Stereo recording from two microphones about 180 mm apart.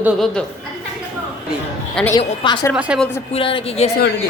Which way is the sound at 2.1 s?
25° left (ahead or behind).